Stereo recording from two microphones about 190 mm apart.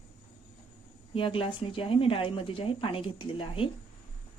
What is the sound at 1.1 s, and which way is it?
Speech, 30° left (ahead or behind).